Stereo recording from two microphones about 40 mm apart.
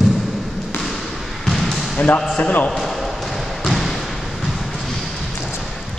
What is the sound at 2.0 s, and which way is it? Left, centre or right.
Speech, left.